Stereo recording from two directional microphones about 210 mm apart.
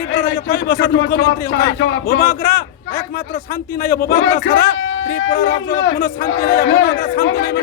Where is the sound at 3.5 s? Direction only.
45° left (ahead or behind).